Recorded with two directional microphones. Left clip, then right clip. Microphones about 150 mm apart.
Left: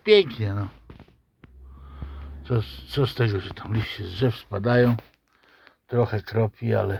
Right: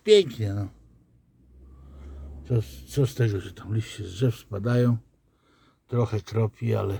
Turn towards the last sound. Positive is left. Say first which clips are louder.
# left 4 dB
turn(degrees=-10)  # may be behind; listen again after turning